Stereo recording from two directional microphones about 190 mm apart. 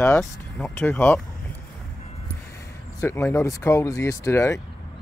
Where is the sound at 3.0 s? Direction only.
15° left (ahead or behind).